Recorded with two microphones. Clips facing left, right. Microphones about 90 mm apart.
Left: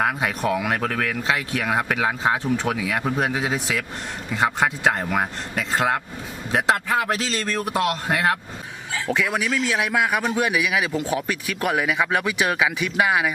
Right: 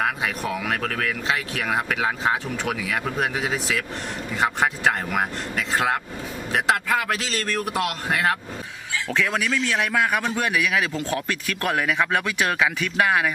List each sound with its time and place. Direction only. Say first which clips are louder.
0.7 s a man's voice: left 2 dB; 25° left (ahead or behind)
1.7 s a man's voice: left 1 dB; 35° left (ahead or behind)
9.0 s a man's voice: left 1 dB; 10° left (ahead or behind)